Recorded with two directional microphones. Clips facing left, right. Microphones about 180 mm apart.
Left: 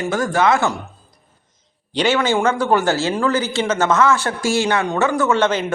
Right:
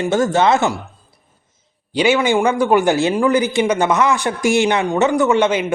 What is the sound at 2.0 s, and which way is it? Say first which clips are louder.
A man's voice: right 2 dB; 10° right (ahead or behind).